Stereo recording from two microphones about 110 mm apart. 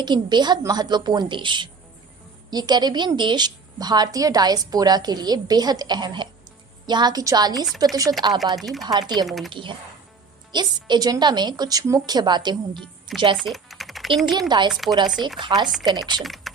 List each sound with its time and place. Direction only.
0.0 s a woman's voice: 40° right (ahead or behind)
8.2 s chopping: 45° right (ahead or behind)
8.5 s speech: centre (ahead or behind)
8.9 s a woman's voice: 35° right (ahead or behind)
9.2 s speech: centre (ahead or behind)
9.5 s chopping: 50° right (ahead or behind)
10.5 s a woman's voice: 40° right (ahead or behind)
12.8 s music: centre (ahead or behind)
13.3 s speech: centre (ahead or behind)
14.3 s a woman's voice: 40° right (ahead or behind)
14.7 s speech: centre (ahead or behind)
15.4 s chopping: 45° right (ahead or behind)
16.0 s a woman's voice: 40° right (ahead or behind)
16.2 s speech: centre (ahead or behind)